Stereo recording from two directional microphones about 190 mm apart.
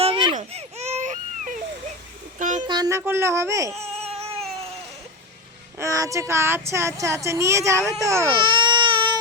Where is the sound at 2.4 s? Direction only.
40° right (ahead or behind).